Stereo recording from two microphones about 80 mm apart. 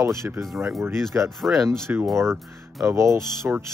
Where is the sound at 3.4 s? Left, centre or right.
Centre.